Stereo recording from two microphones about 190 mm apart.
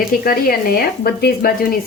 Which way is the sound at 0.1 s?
50° left (ahead or behind).